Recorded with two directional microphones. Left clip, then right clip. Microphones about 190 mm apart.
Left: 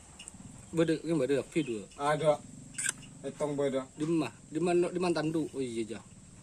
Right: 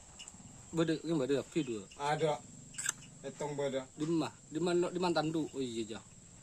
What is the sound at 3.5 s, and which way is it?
Speech, 30° right (ahead or behind).